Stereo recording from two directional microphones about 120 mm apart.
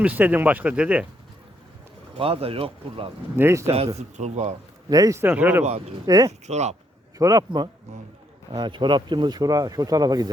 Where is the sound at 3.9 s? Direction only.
70° right (ahead or behind).